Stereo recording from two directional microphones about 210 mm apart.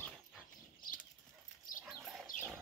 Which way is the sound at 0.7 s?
40° left (ahead or behind).